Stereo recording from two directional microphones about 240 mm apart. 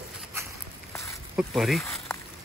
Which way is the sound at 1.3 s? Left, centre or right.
Centre.